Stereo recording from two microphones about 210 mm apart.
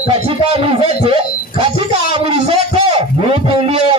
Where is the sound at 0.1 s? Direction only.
25° right (ahead or behind).